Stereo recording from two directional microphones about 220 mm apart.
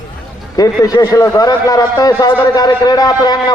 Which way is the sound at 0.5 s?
15° left (ahead or behind).